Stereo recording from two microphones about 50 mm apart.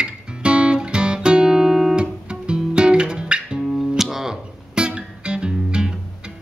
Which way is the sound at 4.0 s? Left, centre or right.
Centre.